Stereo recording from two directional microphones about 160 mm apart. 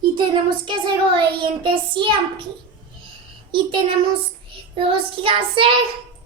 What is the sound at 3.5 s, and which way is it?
Child singing, 30° right (ahead or behind).